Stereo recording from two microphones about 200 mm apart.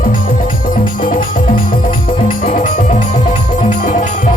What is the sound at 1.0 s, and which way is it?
Music, 40° left (ahead or behind).